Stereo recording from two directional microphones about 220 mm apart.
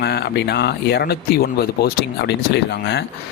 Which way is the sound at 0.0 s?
50° left (ahead or behind).